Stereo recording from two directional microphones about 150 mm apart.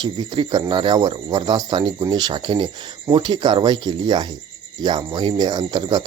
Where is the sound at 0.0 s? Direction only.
30° right (ahead or behind).